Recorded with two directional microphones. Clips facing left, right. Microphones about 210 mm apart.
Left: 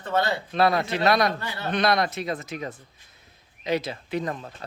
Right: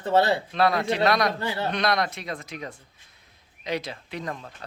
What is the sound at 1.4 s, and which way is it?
Speech, 25° right (ahead or behind).